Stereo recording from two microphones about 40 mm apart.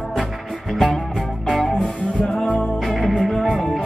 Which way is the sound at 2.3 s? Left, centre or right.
Centre.